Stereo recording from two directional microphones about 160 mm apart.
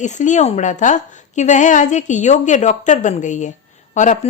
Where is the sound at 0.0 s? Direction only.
50° left (ahead or behind).